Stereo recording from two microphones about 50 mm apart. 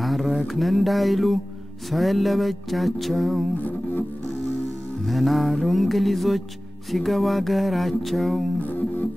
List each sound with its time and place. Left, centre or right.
0.0 s a sound: centre
1.9 s music: centre
3.5 s music: left
5.0 s music: centre
8.5 s music: left